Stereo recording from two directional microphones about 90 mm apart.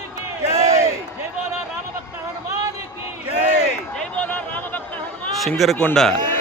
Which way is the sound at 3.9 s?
15° left (ahead or behind).